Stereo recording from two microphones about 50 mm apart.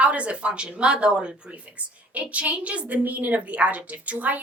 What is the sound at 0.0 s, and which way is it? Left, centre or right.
A woman's voice, right.